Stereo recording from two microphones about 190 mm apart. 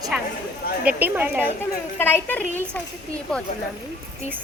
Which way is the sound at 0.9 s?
10° right (ahead or behind).